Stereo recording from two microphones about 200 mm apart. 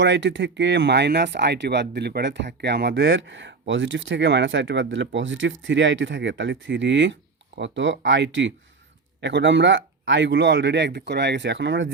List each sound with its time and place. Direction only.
0.0 s speech: 65° right (ahead or behind)